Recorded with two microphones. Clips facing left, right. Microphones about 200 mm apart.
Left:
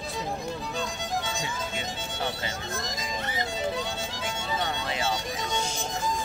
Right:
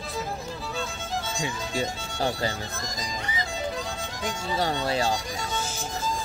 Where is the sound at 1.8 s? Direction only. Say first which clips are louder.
Right 5 dB; 40° right (ahead or behind).